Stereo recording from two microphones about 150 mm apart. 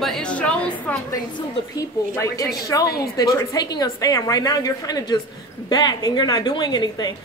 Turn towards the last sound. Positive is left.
turn(degrees=30)  # may be behind; listen again after turning